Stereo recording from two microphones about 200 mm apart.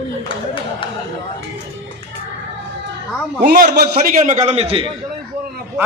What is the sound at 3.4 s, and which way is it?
A man's voice, 45° right (ahead or behind).